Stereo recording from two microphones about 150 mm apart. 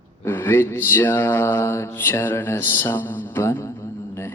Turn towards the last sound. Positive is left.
turn(degrees=20)  # may be behind; listen again after turning